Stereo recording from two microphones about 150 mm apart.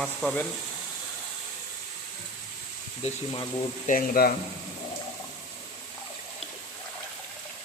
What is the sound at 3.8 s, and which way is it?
Speech, 70° left (ahead or behind).